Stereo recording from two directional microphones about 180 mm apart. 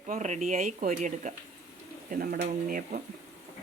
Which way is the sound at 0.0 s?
45° right (ahead or behind).